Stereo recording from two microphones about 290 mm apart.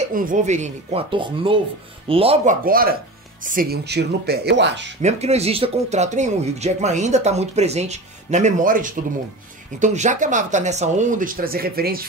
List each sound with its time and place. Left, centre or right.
0.0 s speech: right
5.0 s speech: right